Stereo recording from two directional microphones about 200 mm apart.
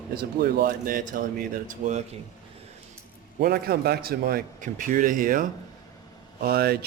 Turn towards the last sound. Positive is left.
turn(degrees=-50)  # may be behind; listen again after turning